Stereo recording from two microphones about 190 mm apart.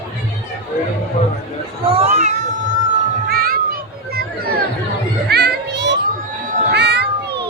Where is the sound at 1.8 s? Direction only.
30° right (ahead or behind).